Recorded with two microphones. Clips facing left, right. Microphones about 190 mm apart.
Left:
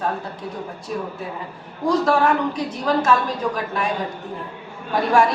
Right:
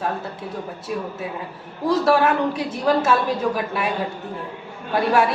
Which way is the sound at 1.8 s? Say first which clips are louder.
Even; 5° right (ahead or behind).